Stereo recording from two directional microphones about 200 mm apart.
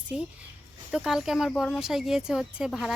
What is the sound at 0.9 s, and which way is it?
Speech, centre (ahead or behind).